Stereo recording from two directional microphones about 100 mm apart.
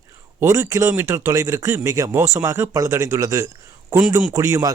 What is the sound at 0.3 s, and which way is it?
Speech, 30° right (ahead or behind).